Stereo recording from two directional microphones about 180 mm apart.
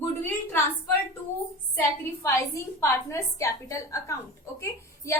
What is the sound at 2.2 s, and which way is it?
A woman's voice, 15° left (ahead or behind).